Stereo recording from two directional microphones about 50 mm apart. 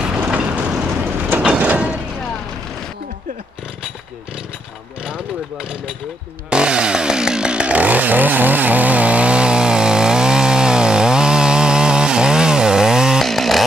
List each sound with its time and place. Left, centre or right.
0.3 s vehicle: centre
1.4 s sliding door: right
5.0 s vehicle: centre
6.5 s chainsaw: centre
13.2 s chainsaw: centre